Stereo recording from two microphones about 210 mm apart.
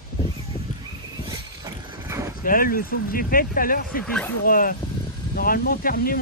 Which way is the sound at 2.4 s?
45° left (ahead or behind).